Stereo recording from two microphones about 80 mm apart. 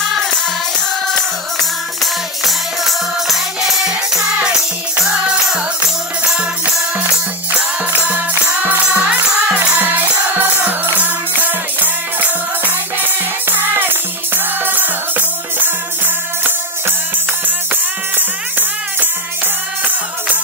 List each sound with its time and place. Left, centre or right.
2.4 s music: centre; by 15.7 s right
18.1 s music: right